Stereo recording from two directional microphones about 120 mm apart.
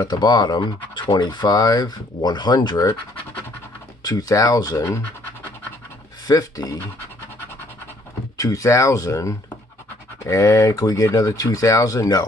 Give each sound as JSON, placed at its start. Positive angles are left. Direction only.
{"t": 0.0, "sound": "speech", "side_deg": 35}
{"t": 4.0, "sound": "speech", "side_deg": 30}
{"t": 6.2, "sound": "speech", "side_deg": 30}
{"t": 8.4, "sound": "speech", "side_deg": 25}